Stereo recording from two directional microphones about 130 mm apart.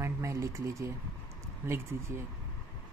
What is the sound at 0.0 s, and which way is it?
Speech, 20° right (ahead or behind).